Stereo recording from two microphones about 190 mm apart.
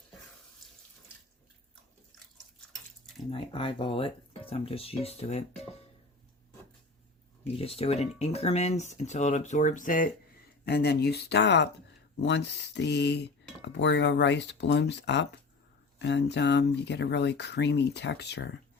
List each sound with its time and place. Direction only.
3.2 s speech: 25° left (ahead or behind)
7.4 s speech: 30° left (ahead or behind)
10.7 s speech: 60° left (ahead or behind)